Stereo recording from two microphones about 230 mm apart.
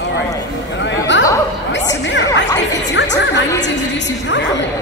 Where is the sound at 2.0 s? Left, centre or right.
Left.